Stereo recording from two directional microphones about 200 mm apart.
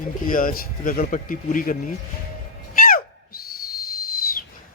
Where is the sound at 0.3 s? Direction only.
45° left (ahead or behind).